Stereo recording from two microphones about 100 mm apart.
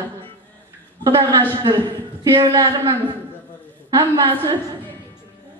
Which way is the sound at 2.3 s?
40° right (ahead or behind).